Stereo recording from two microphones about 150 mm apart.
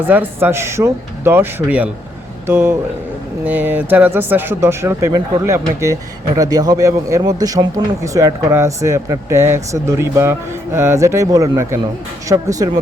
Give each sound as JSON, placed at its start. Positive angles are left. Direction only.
{"t": 0.1, "sound": "speech", "side_deg": -10}